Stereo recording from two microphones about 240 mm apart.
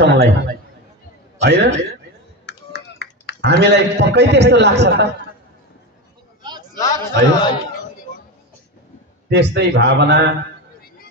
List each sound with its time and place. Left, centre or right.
0.0 s a man's voice: right
1.4 s a man's voice: right
2.4 s a sound: left
3.3 s a man's voice: right
6.4 s a sound: centre
6.8 s a man's voice: centre
9.3 s a man's voice: right